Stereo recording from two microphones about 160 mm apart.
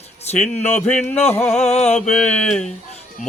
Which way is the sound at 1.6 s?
45° left (ahead or behind).